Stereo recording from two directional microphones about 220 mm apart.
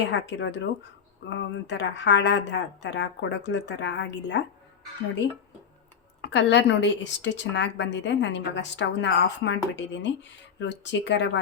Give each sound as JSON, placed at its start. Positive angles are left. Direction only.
{"t": 0.0, "sound": "a woman's voice", "side_deg": 55}
{"t": 6.2, "sound": "a woman's voice", "side_deg": 55}